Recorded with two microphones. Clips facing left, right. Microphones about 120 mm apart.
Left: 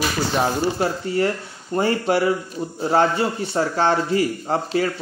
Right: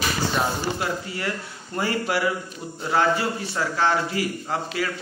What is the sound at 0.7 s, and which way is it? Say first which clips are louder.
A man's voice: left 7 dB; 35° left (ahead or behind).